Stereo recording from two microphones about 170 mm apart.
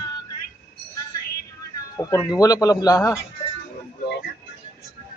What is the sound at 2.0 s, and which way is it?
Speech, 20° left (ahead or behind).